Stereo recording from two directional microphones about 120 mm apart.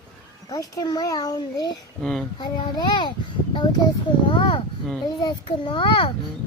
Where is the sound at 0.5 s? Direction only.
30° left (ahead or behind).